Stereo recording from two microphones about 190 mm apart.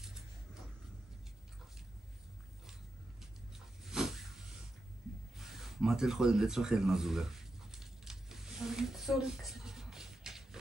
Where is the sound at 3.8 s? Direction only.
Centre (ahead or behind).